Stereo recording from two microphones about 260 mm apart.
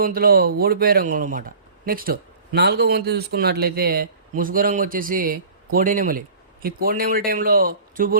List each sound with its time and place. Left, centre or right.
0.0 s speech: right